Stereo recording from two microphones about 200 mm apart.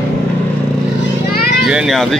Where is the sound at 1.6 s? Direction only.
Centre (ahead or behind).